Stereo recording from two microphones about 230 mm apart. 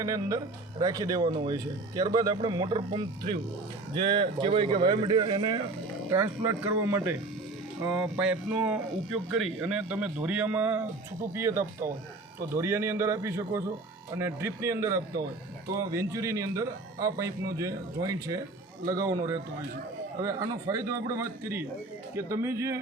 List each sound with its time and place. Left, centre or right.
0.0 s speech: centre